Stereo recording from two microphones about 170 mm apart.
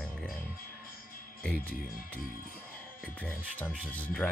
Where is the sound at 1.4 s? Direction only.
5° left (ahead or behind).